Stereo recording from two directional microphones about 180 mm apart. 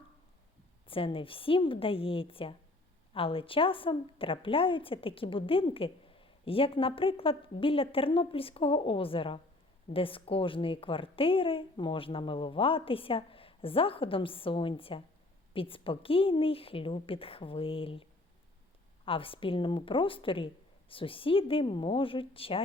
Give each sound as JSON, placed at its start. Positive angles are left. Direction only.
{"t": 0.9, "sound": "a woman's voice", "side_deg": 30}
{"t": 19.0, "sound": "speech", "side_deg": 30}